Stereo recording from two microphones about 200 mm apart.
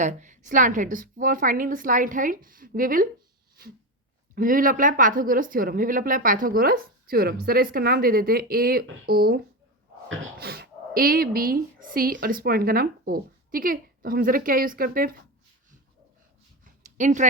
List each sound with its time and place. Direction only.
0.0 s a woman's voice: 40° right (ahead or behind)
4.4 s a woman's voice: 45° right (ahead or behind)
10.4 s a woman's voice: 50° right (ahead or behind)
16.6 s a sound: 40° right (ahead or behind)